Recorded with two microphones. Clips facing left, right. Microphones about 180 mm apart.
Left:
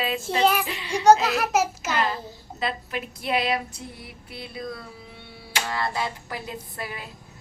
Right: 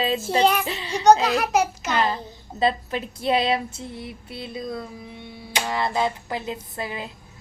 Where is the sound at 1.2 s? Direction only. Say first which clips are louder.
Right 2 dB; centre (ahead or behind).